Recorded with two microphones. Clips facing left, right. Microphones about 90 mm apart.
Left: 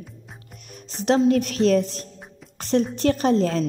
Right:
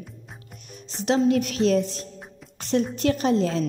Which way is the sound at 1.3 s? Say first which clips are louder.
Left 2 dB; 45° left (ahead or behind).